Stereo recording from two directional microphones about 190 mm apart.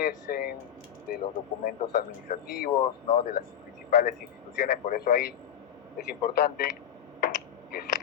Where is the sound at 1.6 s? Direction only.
50° left (ahead or behind).